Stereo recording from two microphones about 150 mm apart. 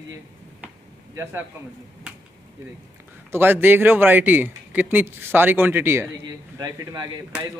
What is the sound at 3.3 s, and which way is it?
Speech, 15° right (ahead or behind).